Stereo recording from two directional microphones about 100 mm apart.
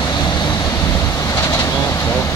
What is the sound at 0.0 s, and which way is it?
Vehicle, 45° left (ahead or behind).